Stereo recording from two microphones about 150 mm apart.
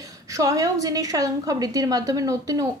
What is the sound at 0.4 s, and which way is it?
A woman's voice, 20° right (ahead or behind).